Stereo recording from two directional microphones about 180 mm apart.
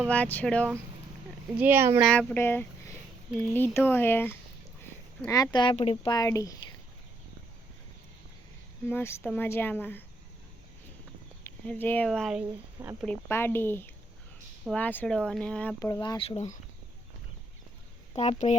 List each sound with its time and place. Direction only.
0.1 s speech: 10° left (ahead or behind)
1.5 s speech: 10° right (ahead or behind)
2.0 s speech: 10° left (ahead or behind); by 6.1 s 30° left (ahead or behind)
6.1 s speech: 20° left (ahead or behind)
8.9 s speech: 15° left (ahead or behind)
11.4 s speech: 10° left (ahead or behind)
13.1 s speech: 10° left (ahead or behind)
15.8 s speech: 20° left (ahead or behind)
18.2 s speech: 40° left (ahead or behind)